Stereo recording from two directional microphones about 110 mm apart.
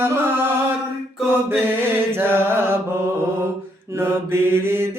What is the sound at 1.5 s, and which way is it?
Mantra, 20° right (ahead or behind).